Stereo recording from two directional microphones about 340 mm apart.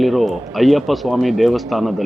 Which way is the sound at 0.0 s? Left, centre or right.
Centre.